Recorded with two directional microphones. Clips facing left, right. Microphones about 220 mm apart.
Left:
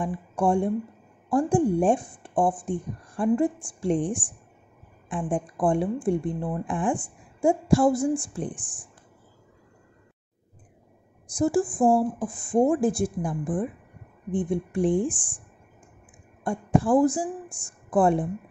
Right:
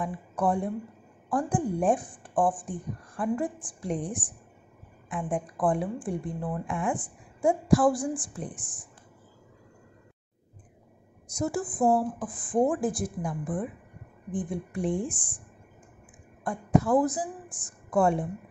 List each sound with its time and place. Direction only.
0.0 s speech: 30° left (ahead or behind)
11.2 s speech: 30° left (ahead or behind)
16.4 s a woman's voice: 30° left (ahead or behind)